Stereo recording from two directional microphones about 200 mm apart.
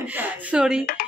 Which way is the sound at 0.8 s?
45° left (ahead or behind).